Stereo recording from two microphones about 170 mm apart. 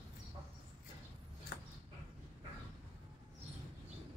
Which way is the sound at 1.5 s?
90° left.